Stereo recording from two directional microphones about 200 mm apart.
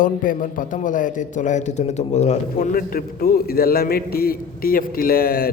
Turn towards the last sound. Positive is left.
turn(degrees=50)  # may be behind; listen again after turning